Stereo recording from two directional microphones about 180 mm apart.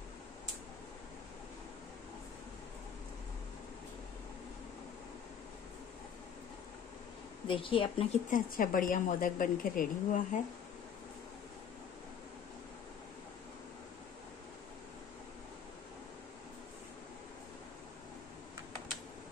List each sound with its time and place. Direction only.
7.4 s a woman's voice: 30° left (ahead or behind)
8.3 s a woman's voice: 50° left (ahead or behind)